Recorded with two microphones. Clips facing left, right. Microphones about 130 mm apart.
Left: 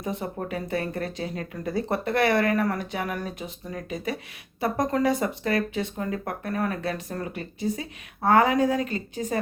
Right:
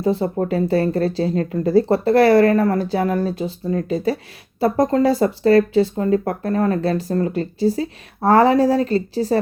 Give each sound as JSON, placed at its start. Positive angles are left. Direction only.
{"t": 0.0, "sound": "speech", "side_deg": -30}